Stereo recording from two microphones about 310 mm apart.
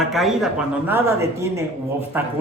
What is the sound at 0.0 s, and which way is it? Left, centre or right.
Speech, centre.